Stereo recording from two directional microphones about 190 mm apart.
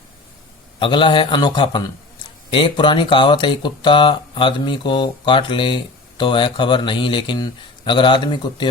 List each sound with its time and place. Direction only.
0.8 s speech: 25° left (ahead or behind)